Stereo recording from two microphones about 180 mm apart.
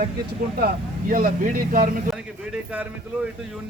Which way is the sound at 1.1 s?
50° right (ahead or behind).